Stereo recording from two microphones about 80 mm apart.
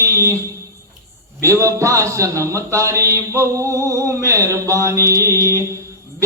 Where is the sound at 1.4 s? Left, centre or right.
Right.